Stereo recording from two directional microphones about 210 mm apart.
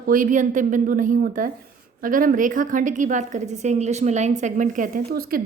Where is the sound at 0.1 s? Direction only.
40° right (ahead or behind).